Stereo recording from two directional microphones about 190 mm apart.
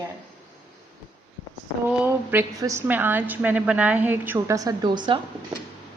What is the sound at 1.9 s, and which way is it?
A woman's voice, 10° right (ahead or behind).